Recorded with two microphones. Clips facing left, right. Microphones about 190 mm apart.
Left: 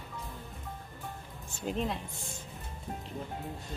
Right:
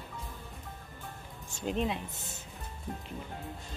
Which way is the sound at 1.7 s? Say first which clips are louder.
Right 1 dB; centre (ahead or behind).